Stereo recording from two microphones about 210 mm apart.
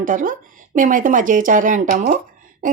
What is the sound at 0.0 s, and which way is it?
Speech, 40° right (ahead or behind).